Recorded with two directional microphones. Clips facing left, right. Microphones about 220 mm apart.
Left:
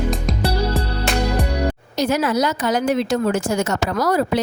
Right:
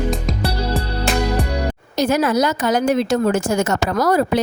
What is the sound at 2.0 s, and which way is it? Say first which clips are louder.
A woman's voice: right 2 dB; 45° right (ahead or behind).